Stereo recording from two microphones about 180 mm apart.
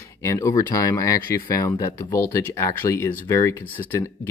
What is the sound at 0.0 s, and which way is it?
Speech, 15° left (ahead or behind).